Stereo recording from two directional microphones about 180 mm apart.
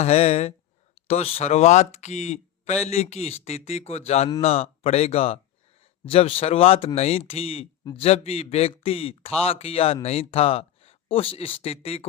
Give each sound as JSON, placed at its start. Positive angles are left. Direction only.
{"t": 0.0, "sound": "speech", "side_deg": 35}